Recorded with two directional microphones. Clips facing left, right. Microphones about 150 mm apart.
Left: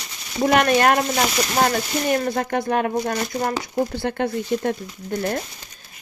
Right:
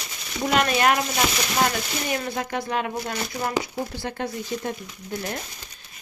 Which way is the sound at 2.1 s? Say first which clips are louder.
Left 7 dB; 45° left (ahead or behind).